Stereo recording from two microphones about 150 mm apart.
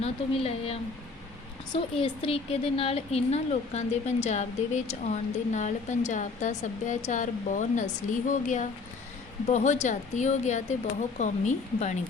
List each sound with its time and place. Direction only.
0.0 s a woman's voice: 45° left (ahead or behind)